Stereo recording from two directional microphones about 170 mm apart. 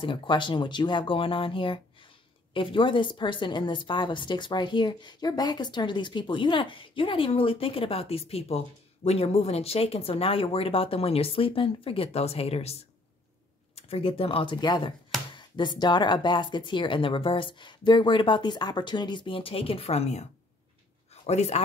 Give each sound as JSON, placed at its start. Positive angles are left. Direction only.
{"t": 0.0, "sound": "a woman's voice", "side_deg": 30}
{"t": 13.7, "sound": "a woman's voice", "side_deg": 35}